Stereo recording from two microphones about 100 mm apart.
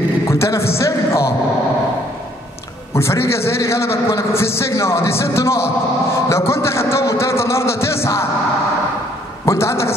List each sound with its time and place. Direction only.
0.3 s a man's voice: 30° left (ahead or behind)
2.9 s a man's voice: 25° left (ahead or behind)
9.5 s a man's voice: 25° left (ahead or behind)